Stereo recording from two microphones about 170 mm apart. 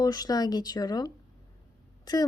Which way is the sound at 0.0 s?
20° left (ahead or behind).